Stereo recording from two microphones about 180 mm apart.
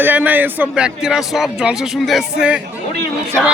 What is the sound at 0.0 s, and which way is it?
A man's voice, 10° right (ahead or behind).